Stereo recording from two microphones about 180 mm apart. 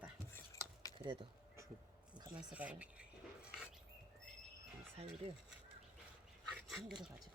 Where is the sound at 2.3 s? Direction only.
5° right (ahead or behind).